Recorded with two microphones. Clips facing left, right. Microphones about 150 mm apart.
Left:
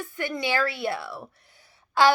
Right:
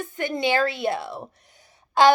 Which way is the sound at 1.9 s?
20° right (ahead or behind).